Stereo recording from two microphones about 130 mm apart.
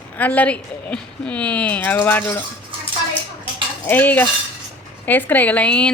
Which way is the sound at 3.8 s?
15° left (ahead or behind).